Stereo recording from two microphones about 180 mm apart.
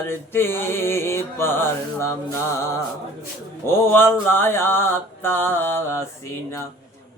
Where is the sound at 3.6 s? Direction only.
15° left (ahead or behind).